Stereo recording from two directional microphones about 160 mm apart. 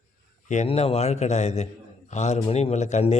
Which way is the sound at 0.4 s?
45° left (ahead or behind).